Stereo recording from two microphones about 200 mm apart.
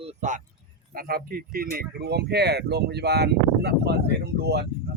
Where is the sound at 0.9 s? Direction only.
45° right (ahead or behind).